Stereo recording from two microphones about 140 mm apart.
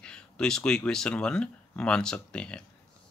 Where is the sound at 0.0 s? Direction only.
5° left (ahead or behind).